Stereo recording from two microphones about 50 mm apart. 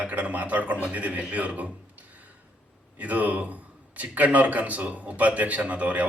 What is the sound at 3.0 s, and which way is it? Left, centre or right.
Speech, right.